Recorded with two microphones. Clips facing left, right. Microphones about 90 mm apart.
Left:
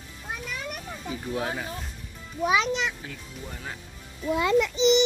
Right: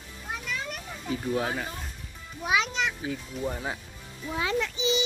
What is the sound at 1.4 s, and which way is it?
Speech, 5° left (ahead or behind).